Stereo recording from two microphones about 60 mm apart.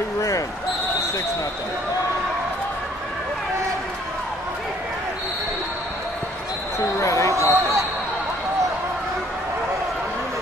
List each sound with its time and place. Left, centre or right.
7.0 s basketball bounce: left
7.3 s basketball bounce: right